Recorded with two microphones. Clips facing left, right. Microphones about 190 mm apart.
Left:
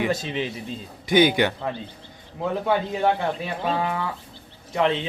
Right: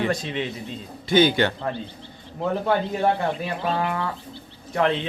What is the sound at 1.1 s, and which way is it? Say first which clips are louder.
Speech: even; 15° left (ahead or behind).